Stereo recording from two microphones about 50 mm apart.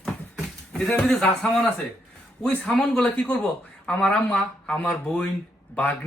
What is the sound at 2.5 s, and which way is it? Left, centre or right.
Speech, left.